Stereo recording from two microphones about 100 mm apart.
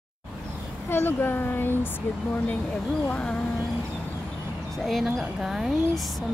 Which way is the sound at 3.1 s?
10° left (ahead or behind).